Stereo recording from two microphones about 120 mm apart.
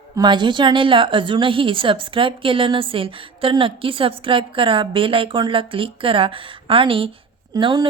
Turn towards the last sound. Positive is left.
turn(degrees=-35)  # may be behind; listen again after turning